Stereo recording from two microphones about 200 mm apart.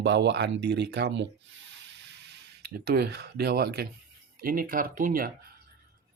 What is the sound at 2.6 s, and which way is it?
Speech, 50° right (ahead or behind).